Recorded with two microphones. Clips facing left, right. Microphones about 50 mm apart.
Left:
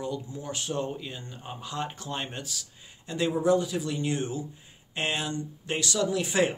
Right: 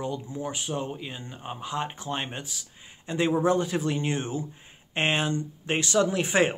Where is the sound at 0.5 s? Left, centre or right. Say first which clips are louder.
Even; centre.